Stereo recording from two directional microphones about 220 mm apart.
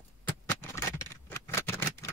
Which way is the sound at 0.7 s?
15° left (ahead or behind).